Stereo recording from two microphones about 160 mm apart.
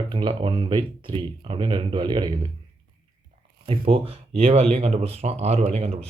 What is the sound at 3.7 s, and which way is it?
Speech, 35° right (ahead or behind).